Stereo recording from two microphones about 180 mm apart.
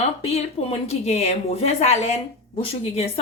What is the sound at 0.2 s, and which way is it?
Speech, 35° left (ahead or behind).